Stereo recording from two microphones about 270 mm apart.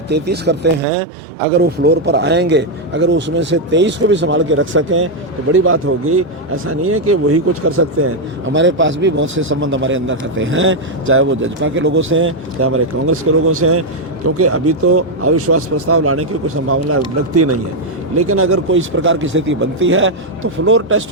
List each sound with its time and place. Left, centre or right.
0.1 s speech: right
8.5 s speech: right